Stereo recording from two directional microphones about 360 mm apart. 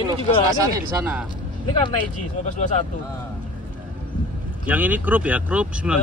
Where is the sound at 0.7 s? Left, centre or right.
Centre.